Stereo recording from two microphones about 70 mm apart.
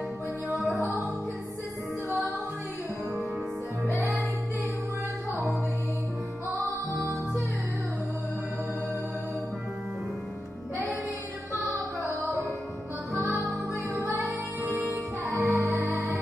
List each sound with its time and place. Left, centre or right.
0.5 s music: centre
3.8 s music: right
5.3 s music: centre
6.6 s music: right
14.6 s music: right